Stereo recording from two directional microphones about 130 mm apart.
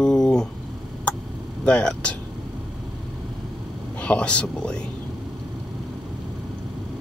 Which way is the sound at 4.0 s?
10° left (ahead or behind).